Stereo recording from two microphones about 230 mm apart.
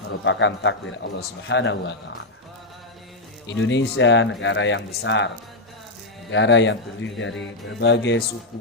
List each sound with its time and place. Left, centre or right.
0.3 s speech: left
3.4 s speech: left
6.3 s speech: left